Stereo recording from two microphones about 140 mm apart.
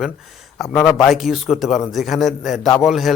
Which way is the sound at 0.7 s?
Centre (ahead or behind).